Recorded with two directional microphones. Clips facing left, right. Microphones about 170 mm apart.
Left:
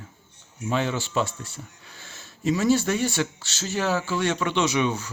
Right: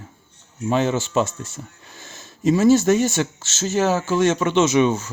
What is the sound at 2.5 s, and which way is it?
Speech, 45° right (ahead or behind).